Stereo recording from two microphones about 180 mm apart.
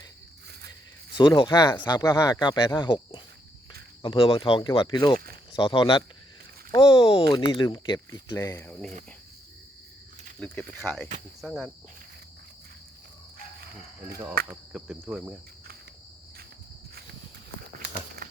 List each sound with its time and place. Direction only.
1.1 s speech: 25° left (ahead or behind)
10.4 s speech: 10° left (ahead or behind)
11.3 s cricket: centre (ahead or behind)
14.4 s cricket: 5° right (ahead or behind)